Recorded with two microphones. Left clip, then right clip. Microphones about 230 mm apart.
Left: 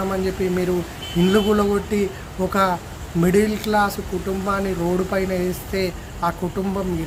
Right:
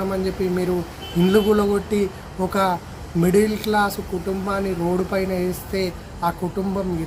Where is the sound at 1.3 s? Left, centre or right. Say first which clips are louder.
Right 1 dB; centre.